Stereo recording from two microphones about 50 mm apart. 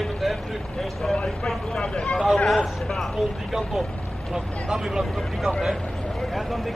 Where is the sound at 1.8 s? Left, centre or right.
Centre.